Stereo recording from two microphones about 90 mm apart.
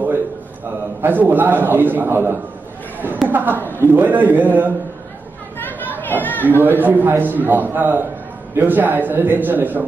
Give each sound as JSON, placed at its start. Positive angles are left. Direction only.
{"t": 1.0, "sound": "a man's voice", "side_deg": -20}
{"t": 5.7, "sound": "chatter", "side_deg": 20}
{"t": 6.4, "sound": "a man's voice", "side_deg": -20}